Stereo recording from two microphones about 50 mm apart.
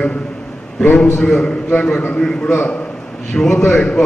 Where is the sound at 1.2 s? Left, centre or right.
Centre.